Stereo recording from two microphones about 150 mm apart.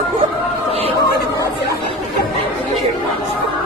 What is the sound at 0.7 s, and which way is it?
Turkey, 40° right (ahead or behind).